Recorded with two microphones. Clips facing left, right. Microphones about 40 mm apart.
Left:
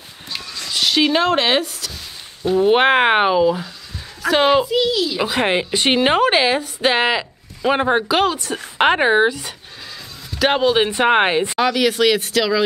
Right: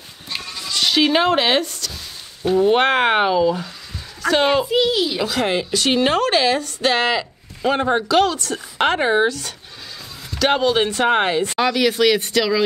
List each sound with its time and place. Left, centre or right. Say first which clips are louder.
0.7 s speech: even; centre
2.6 s speech: left 2 dB; centre
4.6 s a child's voice: even; centre
5.2 s a woman's voice: left 2 dB; left
11.5 s speech: left 1 dB; centre